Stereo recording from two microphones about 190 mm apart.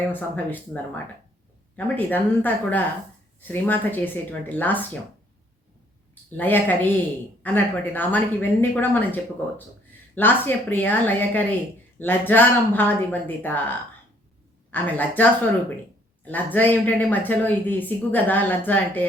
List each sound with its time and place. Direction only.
0.1 s speech: 10° left (ahead or behind)
6.3 s speech: 10° left (ahead or behind)